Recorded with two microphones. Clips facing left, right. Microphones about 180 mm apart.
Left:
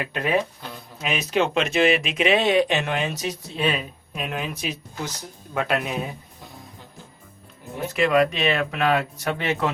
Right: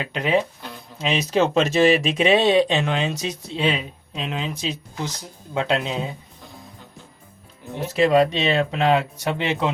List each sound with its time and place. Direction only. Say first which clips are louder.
0.0 s speech: right 1 dB; 20° right (ahead or behind)
1.0 s speech: right 3 dB; 30° right (ahead or behind)
7.9 s speech: right 3 dB; 30° right (ahead or behind)